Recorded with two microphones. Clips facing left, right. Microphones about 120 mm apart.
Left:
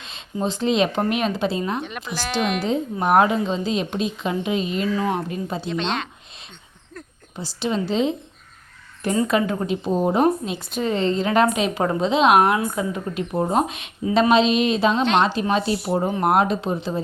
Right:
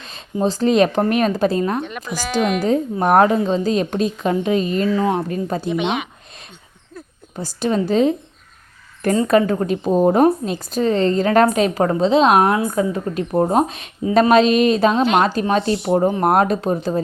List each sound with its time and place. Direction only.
0.0 s a sound: 40° right (ahead or behind)
0.4 s a woman's voice: 40° right (ahead or behind)
1.8 s speech: centre (ahead or behind)
2.6 s a woman's voice: 45° right (ahead or behind)
4.9 s a woman's voice: 30° right (ahead or behind)
5.6 s speech: 15° right (ahead or behind)
7.0 s a sound: 5° right (ahead or behind)
7.3 s a woman's voice: 45° right (ahead or behind)
9.2 s a woman's voice: 45° right (ahead or behind)
15.7 s speech: 20° right (ahead or behind)
16.0 s a woman's voice: 40° right (ahead or behind)